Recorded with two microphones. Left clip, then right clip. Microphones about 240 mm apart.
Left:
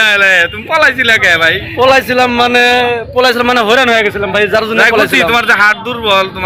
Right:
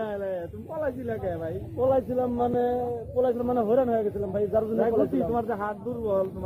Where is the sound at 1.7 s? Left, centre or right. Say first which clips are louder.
Left 14 dB; left.